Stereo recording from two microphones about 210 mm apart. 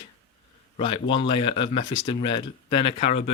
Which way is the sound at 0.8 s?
25° left (ahead or behind).